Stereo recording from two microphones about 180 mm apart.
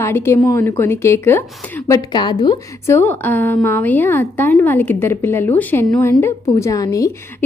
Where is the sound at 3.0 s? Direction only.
10° left (ahead or behind).